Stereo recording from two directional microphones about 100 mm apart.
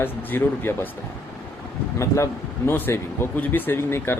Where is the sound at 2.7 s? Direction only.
20° left (ahead or behind).